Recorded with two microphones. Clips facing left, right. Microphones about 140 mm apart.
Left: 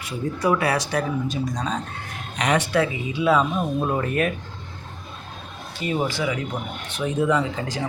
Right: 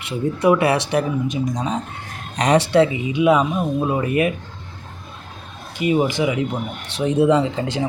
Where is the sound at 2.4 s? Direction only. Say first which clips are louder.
Right 6 dB; 35° right (ahead or behind); by 4.3 s 10° right (ahead or behind).